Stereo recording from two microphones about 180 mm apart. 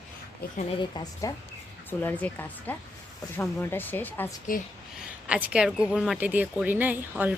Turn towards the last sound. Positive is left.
turn(degrees=-10)  # may be behind; listen again after turning